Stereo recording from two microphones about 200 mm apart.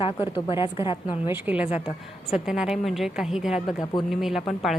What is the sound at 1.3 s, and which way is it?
A woman's voice, 10° right (ahead or behind).